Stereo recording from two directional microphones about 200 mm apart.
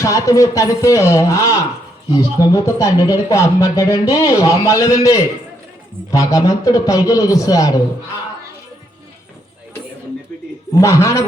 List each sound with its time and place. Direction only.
0.0 s speech: 15° left (ahead or behind)
10.8 s speech: 15° left (ahead or behind)